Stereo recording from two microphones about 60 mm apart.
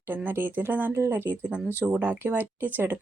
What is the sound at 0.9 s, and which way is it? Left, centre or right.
Speech, right.